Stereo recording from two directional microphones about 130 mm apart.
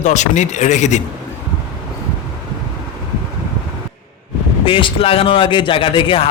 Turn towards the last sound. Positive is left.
turn(degrees=45)  # may be behind; listen again after turning